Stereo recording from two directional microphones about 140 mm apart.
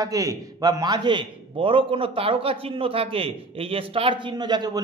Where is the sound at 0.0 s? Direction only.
25° right (ahead or behind).